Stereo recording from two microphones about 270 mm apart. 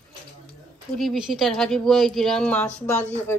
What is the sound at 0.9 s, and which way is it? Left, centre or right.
Speech, centre.